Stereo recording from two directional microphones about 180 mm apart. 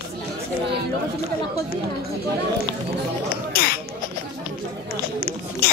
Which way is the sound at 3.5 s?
55° left (ahead or behind).